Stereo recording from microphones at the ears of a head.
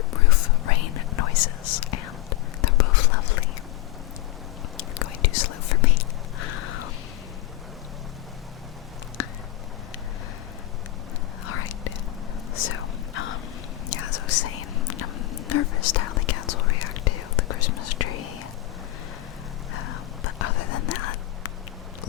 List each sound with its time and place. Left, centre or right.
0.1 s whispering: left
4.8 s whispering: left
6.4 s a sound: left
11.4 s whispering: left
19.7 s whispering: left